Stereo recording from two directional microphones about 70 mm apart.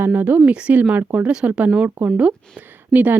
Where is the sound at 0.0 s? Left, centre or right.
Right.